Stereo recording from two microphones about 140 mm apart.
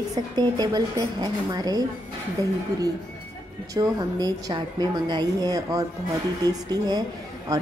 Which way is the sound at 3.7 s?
25° right (ahead or behind).